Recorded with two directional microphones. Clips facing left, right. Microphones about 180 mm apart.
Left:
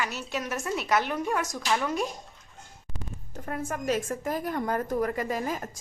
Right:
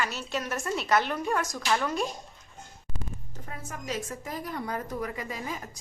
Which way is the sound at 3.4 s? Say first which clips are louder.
Left 9 dB; 55° left (ahead or behind).